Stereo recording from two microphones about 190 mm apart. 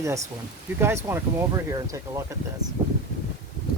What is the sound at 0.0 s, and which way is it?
Speech, 15° right (ahead or behind).